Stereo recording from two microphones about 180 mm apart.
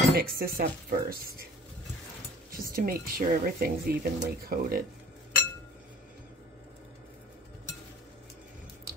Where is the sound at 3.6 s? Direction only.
55° right (ahead or behind).